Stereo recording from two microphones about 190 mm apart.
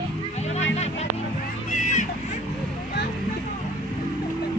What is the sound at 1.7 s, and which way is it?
Music, 40° left (ahead or behind).